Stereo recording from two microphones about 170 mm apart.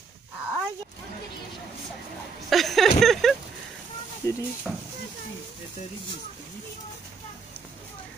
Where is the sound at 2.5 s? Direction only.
Centre (ahead or behind).